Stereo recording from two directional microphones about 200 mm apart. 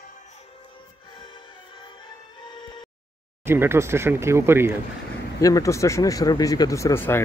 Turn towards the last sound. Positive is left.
turn(degrees=10)  # may be behind; listen again after turning